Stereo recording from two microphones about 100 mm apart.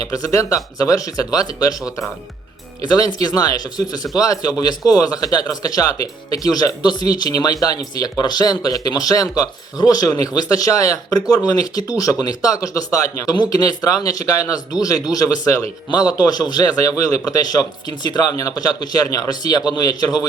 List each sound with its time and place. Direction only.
0.0 s a man's voice: 35° left (ahead or behind)
2.8 s a man's voice: 40° left (ahead or behind)